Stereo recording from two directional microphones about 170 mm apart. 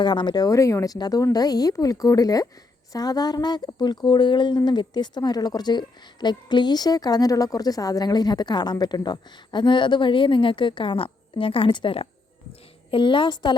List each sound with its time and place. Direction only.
0.0 s speech: 25° left (ahead or behind)